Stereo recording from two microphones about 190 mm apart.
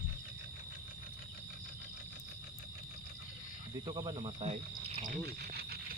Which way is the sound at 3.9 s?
25° right (ahead or behind).